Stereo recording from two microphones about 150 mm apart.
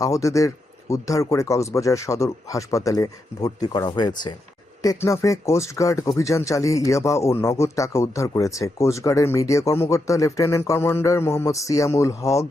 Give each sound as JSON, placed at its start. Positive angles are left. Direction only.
{"t": 0.0, "sound": "speech", "side_deg": 20}